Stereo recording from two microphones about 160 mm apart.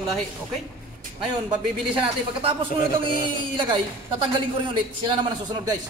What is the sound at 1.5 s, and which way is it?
Speech, 35° right (ahead or behind).